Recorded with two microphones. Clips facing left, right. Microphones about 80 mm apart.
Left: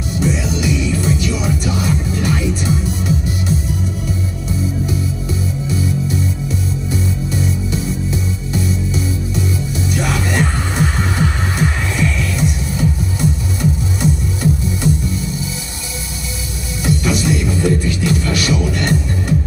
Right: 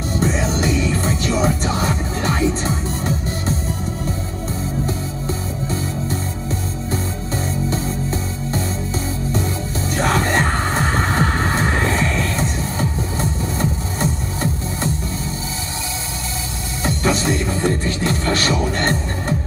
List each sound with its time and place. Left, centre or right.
0.2 s music: right
5.7 s music: right
16.8 s music: right